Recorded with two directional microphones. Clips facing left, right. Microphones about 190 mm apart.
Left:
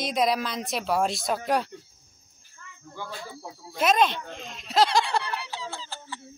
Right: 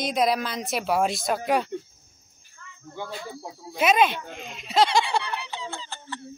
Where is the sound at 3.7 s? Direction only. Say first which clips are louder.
Right 2 dB; 5° right (ahead or behind).